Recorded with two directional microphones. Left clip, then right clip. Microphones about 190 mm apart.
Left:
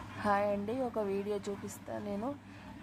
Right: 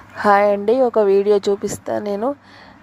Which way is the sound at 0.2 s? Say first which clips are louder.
Right 18 dB; 40° right (ahead or behind).